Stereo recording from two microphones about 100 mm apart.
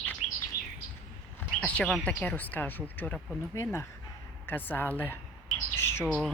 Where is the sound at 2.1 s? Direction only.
15° left (ahead or behind).